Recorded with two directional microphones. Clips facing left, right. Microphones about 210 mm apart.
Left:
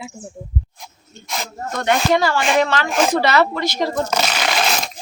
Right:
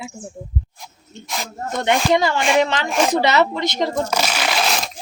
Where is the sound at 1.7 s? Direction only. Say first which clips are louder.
Even; 20° right (ahead or behind); by 4.9 s centre (ahead or behind).